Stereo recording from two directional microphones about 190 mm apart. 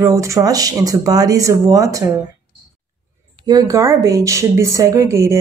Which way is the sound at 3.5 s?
20° right (ahead or behind).